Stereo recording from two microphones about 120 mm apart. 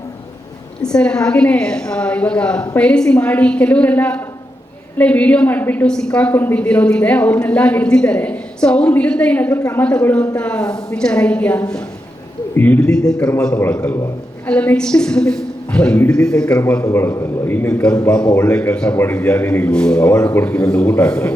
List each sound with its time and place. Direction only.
0.8 s a woman's voice: 5° left (ahead or behind)
9.6 s a woman's voice: 25° left (ahead or behind)
9.8 s a woman's voice: 10° left (ahead or behind)
14.4 s a woman's voice: 10° left (ahead or behind)
16.8 s a woman's voice: 20° left (ahead or behind)